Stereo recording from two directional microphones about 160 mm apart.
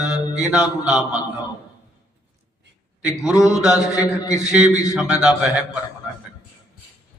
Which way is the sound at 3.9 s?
20° left (ahead or behind).